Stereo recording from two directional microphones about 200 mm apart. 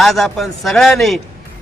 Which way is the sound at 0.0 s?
Centre (ahead or behind).